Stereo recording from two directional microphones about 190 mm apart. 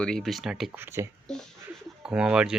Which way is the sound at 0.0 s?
5° left (ahead or behind).